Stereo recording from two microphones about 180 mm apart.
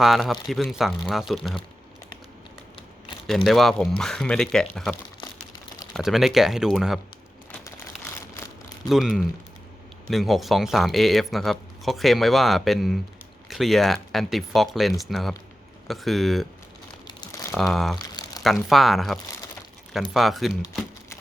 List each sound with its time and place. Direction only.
0.0 s speech: centre (ahead or behind)
3.2 s speech: centre (ahead or behind)
8.9 s speech: centre (ahead or behind)
17.1 s crumpling: 20° left (ahead or behind)
17.6 s speech: centre (ahead or behind)
17.9 s a sound: 20° left (ahead or behind)
18.4 s speech: centre (ahead or behind)